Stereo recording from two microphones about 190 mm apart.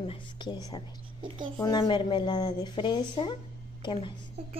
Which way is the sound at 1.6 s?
20° left (ahead or behind).